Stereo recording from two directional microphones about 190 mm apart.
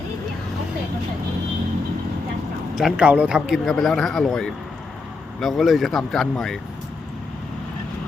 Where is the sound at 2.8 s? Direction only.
5° right (ahead or behind).